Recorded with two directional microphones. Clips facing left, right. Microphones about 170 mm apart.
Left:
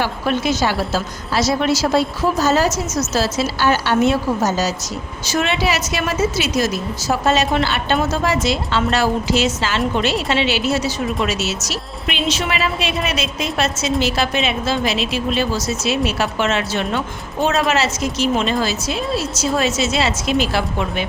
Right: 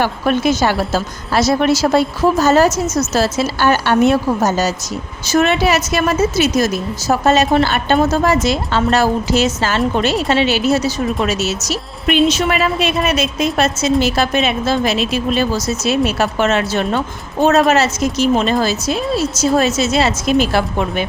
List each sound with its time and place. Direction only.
0.0 s a woman's voice: 50° right (ahead or behind)